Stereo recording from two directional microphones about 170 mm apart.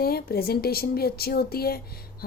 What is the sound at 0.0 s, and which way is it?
A woman's voice, 65° left (ahead or behind).